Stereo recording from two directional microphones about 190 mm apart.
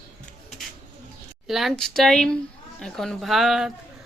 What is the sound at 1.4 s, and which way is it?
Speech, centre (ahead or behind).